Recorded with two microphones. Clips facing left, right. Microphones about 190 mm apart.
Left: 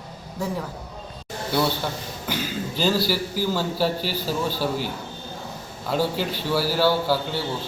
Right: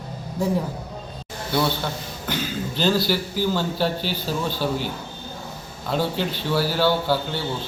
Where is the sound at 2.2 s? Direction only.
5° left (ahead or behind).